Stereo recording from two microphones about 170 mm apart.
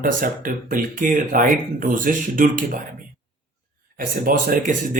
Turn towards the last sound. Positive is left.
turn(degrees=-50)  # may be behind; listen again after turning